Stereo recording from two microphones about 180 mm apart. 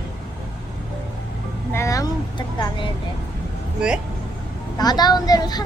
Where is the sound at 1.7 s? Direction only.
15° left (ahead or behind).